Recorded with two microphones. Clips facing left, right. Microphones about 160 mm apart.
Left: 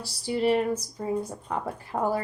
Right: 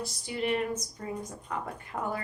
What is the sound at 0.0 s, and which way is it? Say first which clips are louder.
Speech: left 7 dB; 30° left (ahead or behind).